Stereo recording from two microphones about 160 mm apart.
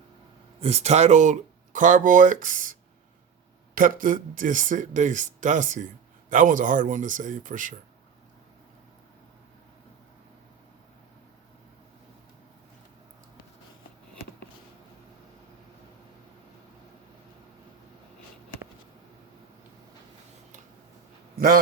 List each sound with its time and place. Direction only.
0.6 s speech: 40° right (ahead or behind)
3.8 s speech: 60° right (ahead or behind)
21.3 s a sound: 65° right (ahead or behind)